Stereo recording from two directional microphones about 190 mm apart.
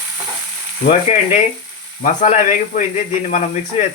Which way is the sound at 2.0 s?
40° left (ahead or behind).